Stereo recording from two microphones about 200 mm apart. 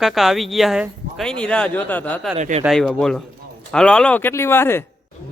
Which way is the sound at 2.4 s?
35° right (ahead or behind).